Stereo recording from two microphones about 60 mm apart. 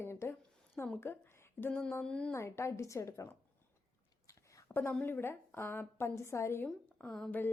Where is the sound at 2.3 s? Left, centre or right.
Left.